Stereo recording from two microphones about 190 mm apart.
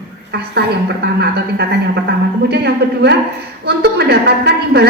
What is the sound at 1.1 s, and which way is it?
A woman's voice, 60° right (ahead or behind).